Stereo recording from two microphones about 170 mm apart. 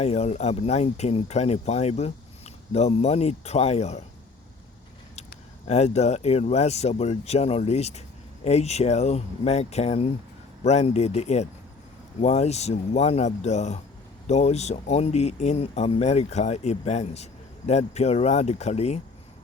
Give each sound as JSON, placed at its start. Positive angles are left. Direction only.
{"t": 0.0, "sound": "speech", "side_deg": 40}
{"t": 5.6, "sound": "speech", "side_deg": 40}